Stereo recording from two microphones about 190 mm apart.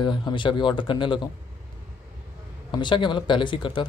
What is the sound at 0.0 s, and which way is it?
Speech, 25° left (ahead or behind).